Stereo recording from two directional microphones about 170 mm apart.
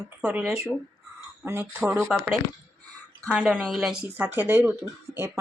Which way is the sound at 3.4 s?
10° right (ahead or behind).